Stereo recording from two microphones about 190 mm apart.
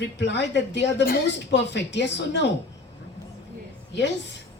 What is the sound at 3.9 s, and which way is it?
Speech, 70° left (ahead or behind).